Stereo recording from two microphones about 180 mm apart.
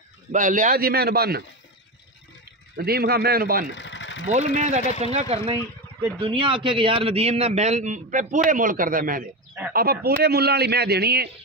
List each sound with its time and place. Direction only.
0.3 s a man's voice: 45° right (ahead or behind)
2.7 s a man's voice: 60° right (ahead or behind)
3.7 s engine: 90° left
4.6 s a man's voice: 40° right (ahead or behind); by 11.2 s 65° right (ahead or behind)